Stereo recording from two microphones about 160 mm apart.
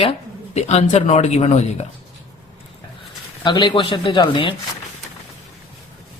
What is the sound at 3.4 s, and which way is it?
A man's voice, 30° left (ahead or behind).